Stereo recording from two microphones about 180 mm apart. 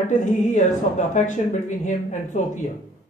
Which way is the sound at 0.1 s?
45° left (ahead or behind).